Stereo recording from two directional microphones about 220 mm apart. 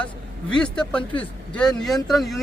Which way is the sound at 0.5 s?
5° left (ahead or behind).